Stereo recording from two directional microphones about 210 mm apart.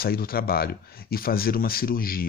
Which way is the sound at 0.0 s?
45° left (ahead or behind).